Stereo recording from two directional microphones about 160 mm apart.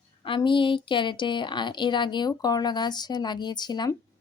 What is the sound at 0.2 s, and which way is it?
Speech, 30° left (ahead or behind).